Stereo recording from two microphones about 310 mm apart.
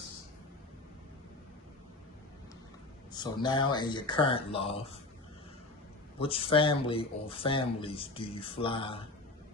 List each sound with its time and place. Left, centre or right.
3.1 s speech: centre
6.1 s speech: centre